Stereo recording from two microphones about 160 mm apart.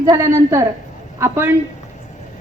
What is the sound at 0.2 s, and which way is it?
A woman's voice, 15° right (ahead or behind).